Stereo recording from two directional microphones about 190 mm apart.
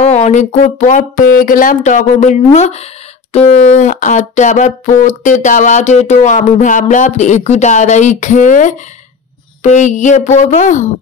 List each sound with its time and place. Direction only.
0.0 s speech: 35° left (ahead or behind)